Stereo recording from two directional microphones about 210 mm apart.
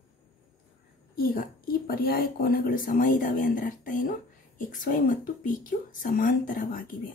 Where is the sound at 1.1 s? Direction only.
40° left (ahead or behind).